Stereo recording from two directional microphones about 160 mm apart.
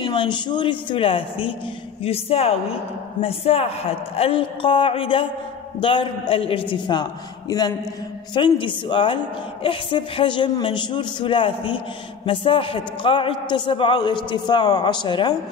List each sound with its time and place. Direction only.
0.0 s a woman's voice: 30° left (ahead or behind)